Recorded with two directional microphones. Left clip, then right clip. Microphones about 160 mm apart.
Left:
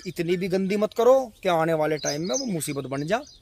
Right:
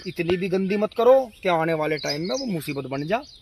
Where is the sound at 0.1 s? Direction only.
20° left (ahead or behind).